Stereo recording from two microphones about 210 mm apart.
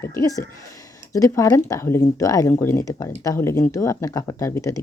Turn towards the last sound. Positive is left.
turn(degrees=15)  # may be behind; listen again after turning